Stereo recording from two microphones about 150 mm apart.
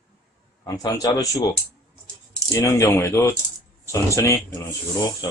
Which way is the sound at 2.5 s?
20° left (ahead or behind).